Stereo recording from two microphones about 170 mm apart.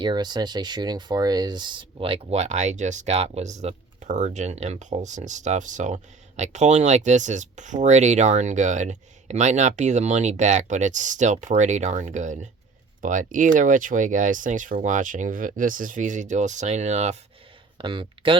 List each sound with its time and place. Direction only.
0.0 s speech: 25° right (ahead or behind); by 17.2 s 40° right (ahead or behind)
17.7 s speech: 30° right (ahead or behind)